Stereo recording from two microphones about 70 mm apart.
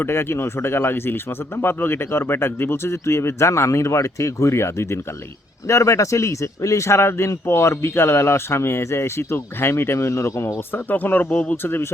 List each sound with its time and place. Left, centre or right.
0.0 s speech: left
10.7 s speech: left